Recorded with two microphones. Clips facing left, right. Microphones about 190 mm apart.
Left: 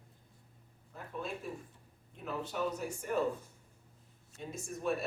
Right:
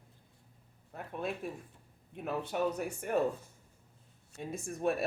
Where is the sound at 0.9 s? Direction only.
60° right (ahead or behind).